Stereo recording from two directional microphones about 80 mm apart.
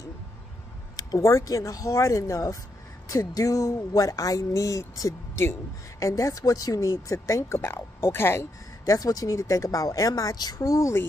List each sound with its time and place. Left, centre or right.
0.9 s speech: left
5.4 s speech: left
6.0 s speech: left
8.8 s speech: left